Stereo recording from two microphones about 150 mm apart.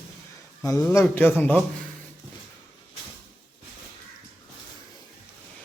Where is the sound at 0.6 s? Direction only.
20° left (ahead or behind).